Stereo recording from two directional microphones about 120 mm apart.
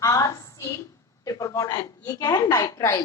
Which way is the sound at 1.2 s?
30° left (ahead or behind).